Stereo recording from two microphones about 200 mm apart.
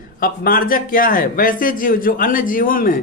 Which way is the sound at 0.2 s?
45° left (ahead or behind).